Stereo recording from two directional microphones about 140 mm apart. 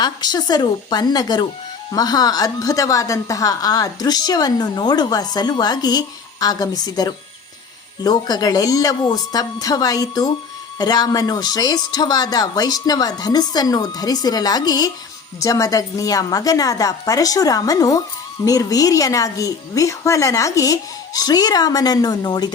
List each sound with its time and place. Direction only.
0.0 s a woman's voice: 30° left (ahead or behind)